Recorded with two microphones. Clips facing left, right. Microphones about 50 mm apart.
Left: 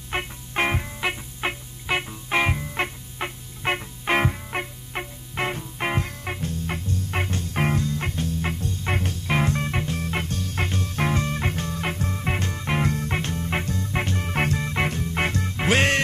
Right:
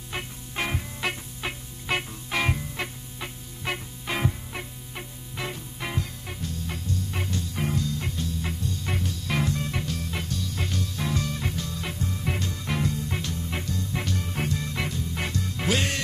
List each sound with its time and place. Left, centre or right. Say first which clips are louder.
0.1 s music: left 6 dB; left
1.9 s music: left 3 dB; centre
2.7 s music: left 6 dB; left
14.3 s music: left 8 dB; left
14.6 s music: left 5 dB; left